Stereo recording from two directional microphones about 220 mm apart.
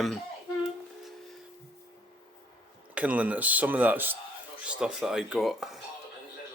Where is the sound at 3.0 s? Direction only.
5° right (ahead or behind).